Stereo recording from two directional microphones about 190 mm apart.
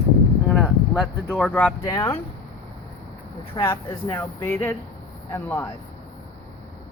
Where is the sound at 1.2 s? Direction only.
5° left (ahead or behind).